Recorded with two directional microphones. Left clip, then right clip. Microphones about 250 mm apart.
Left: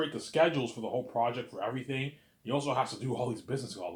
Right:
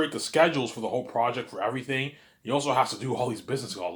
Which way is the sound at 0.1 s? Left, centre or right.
Right.